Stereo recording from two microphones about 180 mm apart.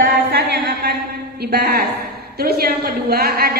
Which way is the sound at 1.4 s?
60° right (ahead or behind).